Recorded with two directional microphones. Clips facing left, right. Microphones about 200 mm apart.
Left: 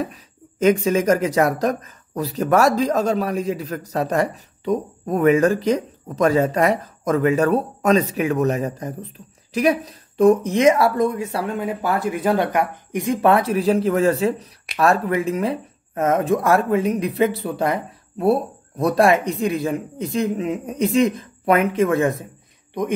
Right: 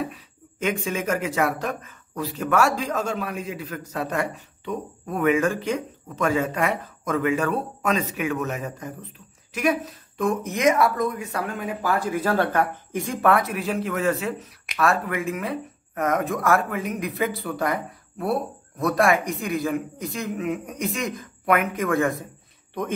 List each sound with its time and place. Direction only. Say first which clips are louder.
0.0 s speech: left 3 dB; 40° left (ahead or behind); by 22.2 s 20° left (ahead or behind)